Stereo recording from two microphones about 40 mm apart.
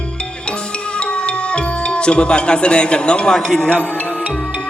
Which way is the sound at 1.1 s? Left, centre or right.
Left.